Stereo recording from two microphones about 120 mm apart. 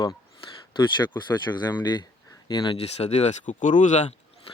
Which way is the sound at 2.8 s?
65° left (ahead or behind).